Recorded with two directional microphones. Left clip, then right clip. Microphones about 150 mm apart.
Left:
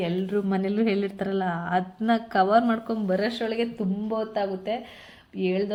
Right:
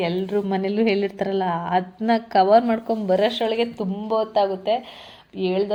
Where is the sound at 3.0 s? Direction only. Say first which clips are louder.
Right 7 dB; 30° right (ahead or behind).